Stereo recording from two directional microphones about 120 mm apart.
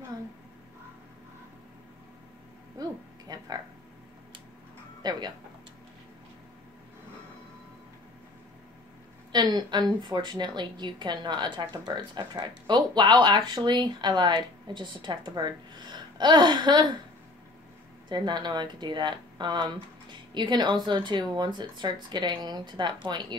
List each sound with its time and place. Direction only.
2.8 s a sound: 30° right (ahead or behind)
5.0 s a woman's voice: 35° right (ahead or behind)
9.3 s a woman's voice: 35° right (ahead or behind)
18.0 s a woman's voice: 40° right (ahead or behind)